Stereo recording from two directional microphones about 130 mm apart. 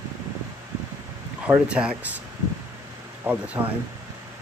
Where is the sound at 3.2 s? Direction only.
15° right (ahead or behind).